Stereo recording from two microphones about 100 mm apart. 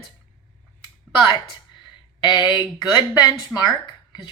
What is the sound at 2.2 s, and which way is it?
A woman's voice, 45° left (ahead or behind).